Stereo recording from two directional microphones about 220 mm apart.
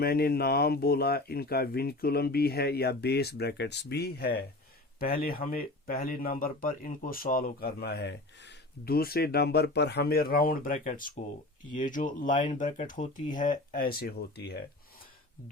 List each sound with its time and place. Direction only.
0.0 s speech: 45° left (ahead or behind)